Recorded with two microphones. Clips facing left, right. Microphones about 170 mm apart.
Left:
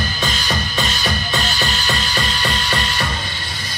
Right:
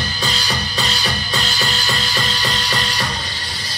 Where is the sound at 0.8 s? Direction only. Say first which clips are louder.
Left 1 dB; 35° right (ahead or behind).